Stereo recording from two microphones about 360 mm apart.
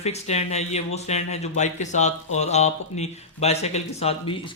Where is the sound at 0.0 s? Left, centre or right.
Centre.